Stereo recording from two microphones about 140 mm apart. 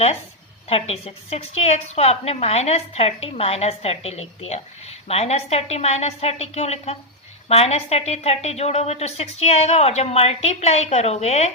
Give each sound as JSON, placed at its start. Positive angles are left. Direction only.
{"t": 0.7, "sound": "a woman's voice", "side_deg": 45}